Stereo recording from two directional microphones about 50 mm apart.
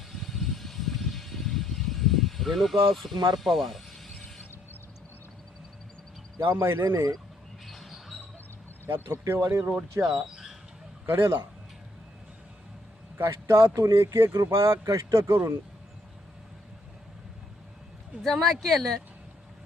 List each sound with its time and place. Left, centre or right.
0.1 s vehicle: centre
6.5 s speech: right
7.7 s rodents: centre
8.9 s a man's voice: right
13.2 s speech: right
14.3 s speech: right
18.2 s speech: centre